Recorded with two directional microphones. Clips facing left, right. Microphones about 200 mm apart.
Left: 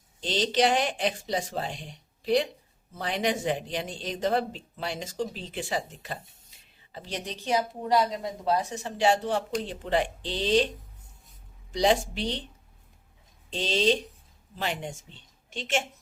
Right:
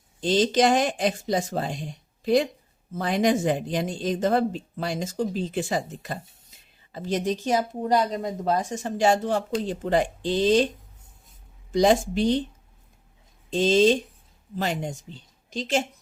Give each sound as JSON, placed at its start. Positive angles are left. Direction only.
{"t": 0.2, "sound": "speech", "side_deg": -45}
{"t": 11.7, "sound": "speech", "side_deg": -45}
{"t": 13.5, "sound": "a woman's voice", "side_deg": -45}